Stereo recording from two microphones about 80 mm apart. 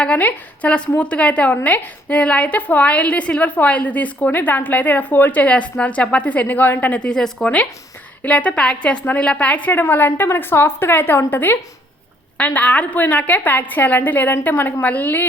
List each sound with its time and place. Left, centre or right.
0.0 s a woman's voice: centre